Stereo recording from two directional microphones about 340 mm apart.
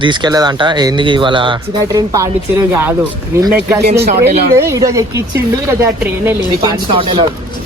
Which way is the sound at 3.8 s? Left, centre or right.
Right.